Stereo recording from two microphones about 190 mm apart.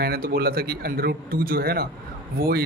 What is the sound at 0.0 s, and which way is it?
A man's voice, 50° right (ahead or behind).